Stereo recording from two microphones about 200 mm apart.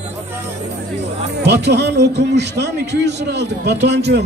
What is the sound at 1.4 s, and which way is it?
A man's voice, 60° right (ahead or behind).